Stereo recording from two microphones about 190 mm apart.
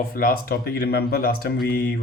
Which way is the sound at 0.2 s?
50° left (ahead or behind).